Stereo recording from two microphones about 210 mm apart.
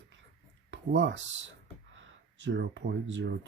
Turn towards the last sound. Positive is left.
turn(degrees=-55)  # may be behind; listen again after turning